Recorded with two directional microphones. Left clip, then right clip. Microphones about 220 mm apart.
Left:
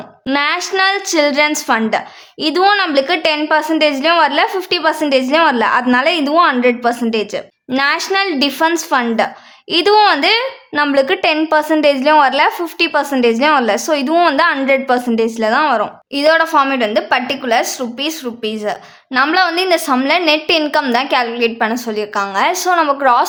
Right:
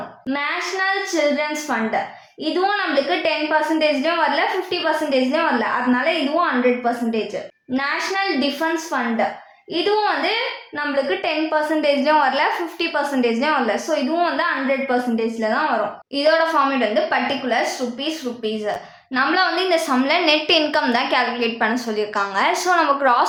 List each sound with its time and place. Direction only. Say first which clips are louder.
0.3 s a woman's voice: left 7 dB; 35° left (ahead or behind)